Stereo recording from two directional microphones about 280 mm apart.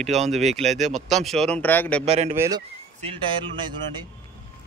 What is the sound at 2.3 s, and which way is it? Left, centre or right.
Speech, centre.